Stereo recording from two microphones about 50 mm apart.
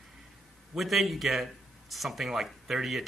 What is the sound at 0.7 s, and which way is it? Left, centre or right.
Speech, centre.